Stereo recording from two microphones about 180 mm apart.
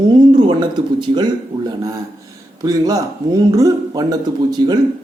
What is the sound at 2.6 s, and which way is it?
Speech, 20° right (ahead or behind).